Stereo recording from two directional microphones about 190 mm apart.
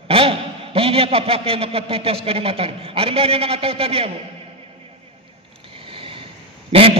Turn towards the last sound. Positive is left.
turn(degrees=-30)  # may be behind; listen again after turning